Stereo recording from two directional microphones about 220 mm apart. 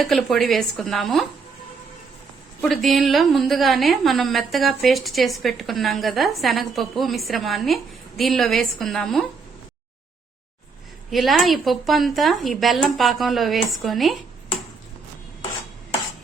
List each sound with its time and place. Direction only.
0.0 s a woman's voice: centre (ahead or behind)
2.6 s a woman's voice: centre (ahead or behind)
11.1 s a woman's voice: centre (ahead or behind)